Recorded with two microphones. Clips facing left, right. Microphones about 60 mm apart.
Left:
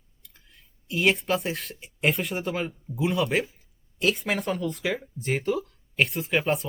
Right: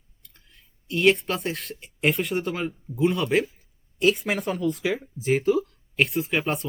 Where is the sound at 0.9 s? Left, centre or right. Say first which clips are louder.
Right 3 dB; centre.